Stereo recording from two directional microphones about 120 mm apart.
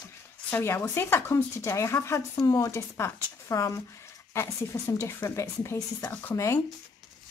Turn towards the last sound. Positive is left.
turn(degrees=25)  # may be behind; listen again after turning